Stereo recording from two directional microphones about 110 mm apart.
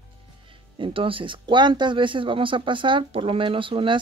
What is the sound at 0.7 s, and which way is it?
Speech, 55° right (ahead or behind).